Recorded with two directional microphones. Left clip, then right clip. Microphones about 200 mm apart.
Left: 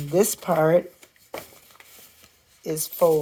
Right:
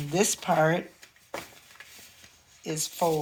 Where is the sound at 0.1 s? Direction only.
55° left (ahead or behind).